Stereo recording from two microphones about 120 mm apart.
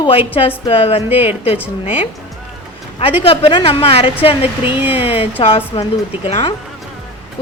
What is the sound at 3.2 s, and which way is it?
Speech, 45° left (ahead or behind).